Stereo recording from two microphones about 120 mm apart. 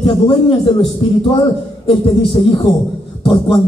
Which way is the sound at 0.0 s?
50° left (ahead or behind).